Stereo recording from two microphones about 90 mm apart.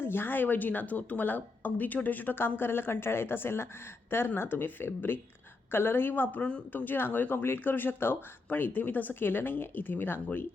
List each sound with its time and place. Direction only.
0.0 s speech: 25° left (ahead or behind)